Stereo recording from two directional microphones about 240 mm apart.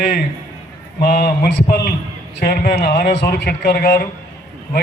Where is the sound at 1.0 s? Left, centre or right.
Left.